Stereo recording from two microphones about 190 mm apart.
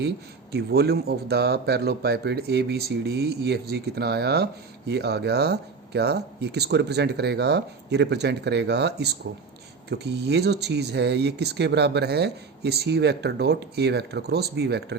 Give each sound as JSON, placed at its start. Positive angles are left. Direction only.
{"t": 0.5, "sound": "speech", "side_deg": -60}